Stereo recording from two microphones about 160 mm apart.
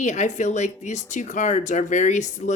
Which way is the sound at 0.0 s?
45° left (ahead or behind).